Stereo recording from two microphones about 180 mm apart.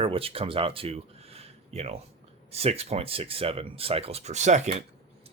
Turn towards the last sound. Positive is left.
turn(degrees=-40)  # may be behind; listen again after turning